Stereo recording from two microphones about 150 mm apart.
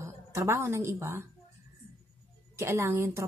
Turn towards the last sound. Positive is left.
turn(degrees=-20)  # may be behind; listen again after turning